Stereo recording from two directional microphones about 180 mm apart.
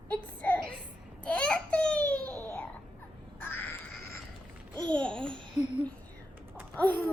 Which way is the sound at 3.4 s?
10° left (ahead or behind).